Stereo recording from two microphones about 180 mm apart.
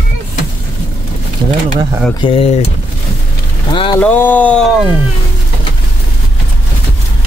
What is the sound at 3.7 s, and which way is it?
Speech, 30° left (ahead or behind).